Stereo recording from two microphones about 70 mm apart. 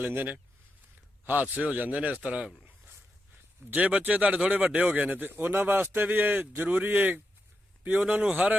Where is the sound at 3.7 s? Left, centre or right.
Centre.